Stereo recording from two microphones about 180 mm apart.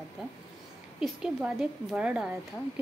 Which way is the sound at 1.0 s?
5° right (ahead or behind).